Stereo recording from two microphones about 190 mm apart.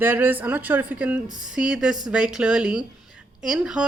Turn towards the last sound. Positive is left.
turn(degrees=-5)  # may be behind; listen again after turning